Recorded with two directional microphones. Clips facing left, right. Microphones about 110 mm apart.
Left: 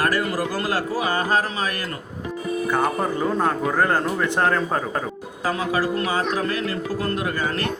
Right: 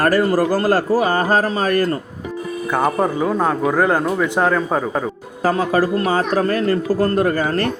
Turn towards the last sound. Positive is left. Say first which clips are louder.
# right 7 dB
turn(degrees=-40)  # may be behind; listen again after turning